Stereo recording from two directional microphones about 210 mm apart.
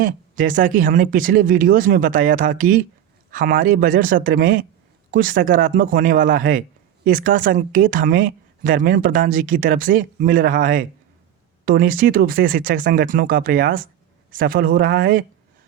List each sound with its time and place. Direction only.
0.0 s speech: 40° right (ahead or behind)